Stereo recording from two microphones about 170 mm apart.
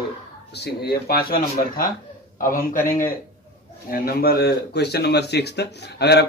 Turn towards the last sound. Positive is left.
turn(degrees=75)  # may be behind; listen again after turning